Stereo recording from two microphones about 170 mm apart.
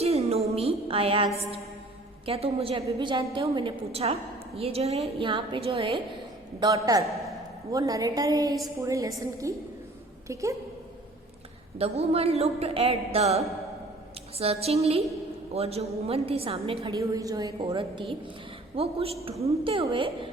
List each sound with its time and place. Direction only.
0.0 s music: 35° right (ahead or behind)
1.4 s a woman's voice: 35° right (ahead or behind)
6.6 s a woman's voice: 20° right (ahead or behind)
11.8 s a woman's voice: 35° right (ahead or behind)
17.0 s a woman's voice: 20° right (ahead or behind)